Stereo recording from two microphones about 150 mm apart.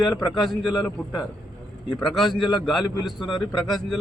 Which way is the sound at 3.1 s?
30° left (ahead or behind).